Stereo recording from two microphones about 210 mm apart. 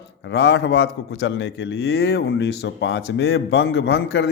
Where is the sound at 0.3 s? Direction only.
55° left (ahead or behind).